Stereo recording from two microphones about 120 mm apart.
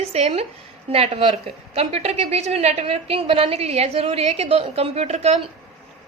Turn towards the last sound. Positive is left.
turn(degrees=-65)  # may be behind; listen again after turning